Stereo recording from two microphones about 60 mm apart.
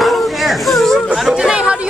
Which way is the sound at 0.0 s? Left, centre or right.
Centre.